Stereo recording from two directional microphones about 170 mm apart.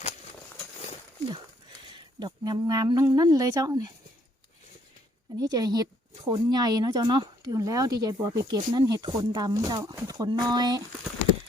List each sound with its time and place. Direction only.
2.1 s speech: 25° right (ahead or behind)
5.4 s speech: 20° right (ahead or behind)